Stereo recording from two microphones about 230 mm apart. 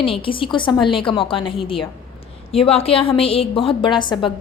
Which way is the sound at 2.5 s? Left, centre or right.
Left.